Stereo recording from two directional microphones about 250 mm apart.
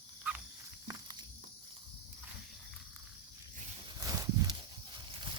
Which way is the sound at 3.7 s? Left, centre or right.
Centre.